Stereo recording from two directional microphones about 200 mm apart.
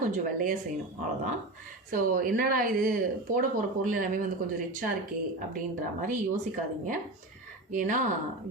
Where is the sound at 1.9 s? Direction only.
45° right (ahead or behind).